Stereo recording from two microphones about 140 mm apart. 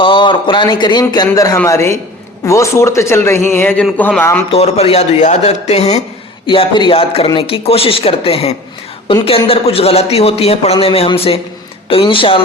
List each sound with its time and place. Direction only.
0.0 s a man's voice: 35° left (ahead or behind); by 4.4 s 15° left (ahead or behind)
4.4 s a man's voice: 45° left (ahead or behind)
6.5 s a man's voice: 35° left (ahead or behind)